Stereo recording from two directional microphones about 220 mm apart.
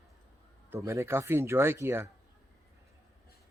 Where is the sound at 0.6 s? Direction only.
15° right (ahead or behind).